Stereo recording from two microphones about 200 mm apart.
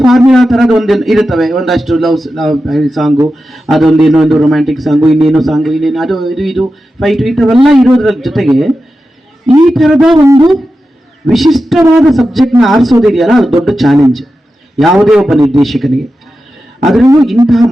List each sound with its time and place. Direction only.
0.3 s speech: centre (ahead or behind)
10.2 s speech: 20° right (ahead or behind)
11.3 s speech: centre (ahead or behind)